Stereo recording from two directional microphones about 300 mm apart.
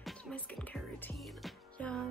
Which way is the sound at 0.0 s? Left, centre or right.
Centre.